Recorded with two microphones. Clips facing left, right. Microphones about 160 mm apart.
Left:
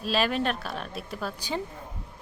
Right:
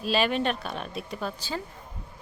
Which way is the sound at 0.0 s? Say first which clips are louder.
Right 1 dB; centre (ahead or behind).